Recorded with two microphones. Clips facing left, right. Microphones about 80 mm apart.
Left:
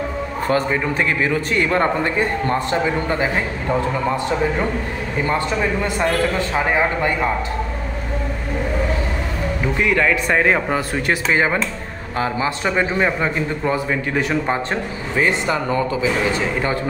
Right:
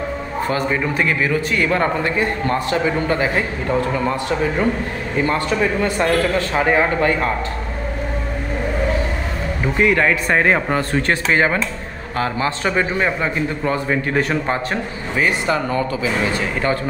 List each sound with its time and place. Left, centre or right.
0.5 s a man's voice: left
5.8 s a man's voice: centre
6.5 s a man's voice: centre
7.0 s a man's voice: centre
9.8 s speech: centre
10.7 s a man's voice: centre
13.8 s a man's voice: centre
14.7 s a man's voice: left